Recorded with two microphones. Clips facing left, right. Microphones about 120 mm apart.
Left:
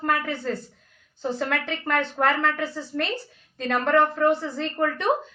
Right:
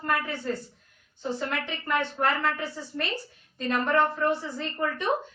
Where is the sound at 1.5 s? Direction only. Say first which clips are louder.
Left 3 dB; 85° left.